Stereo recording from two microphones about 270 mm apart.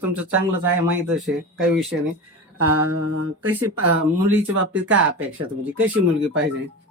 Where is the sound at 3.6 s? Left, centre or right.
Right.